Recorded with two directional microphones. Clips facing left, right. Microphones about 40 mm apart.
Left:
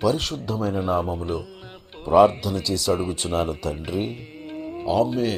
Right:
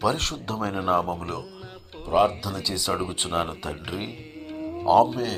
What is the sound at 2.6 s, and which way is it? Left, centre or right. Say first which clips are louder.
Speech: left 3 dB; centre.